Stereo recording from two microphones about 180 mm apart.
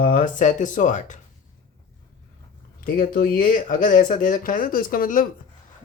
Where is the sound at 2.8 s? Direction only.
55° left (ahead or behind).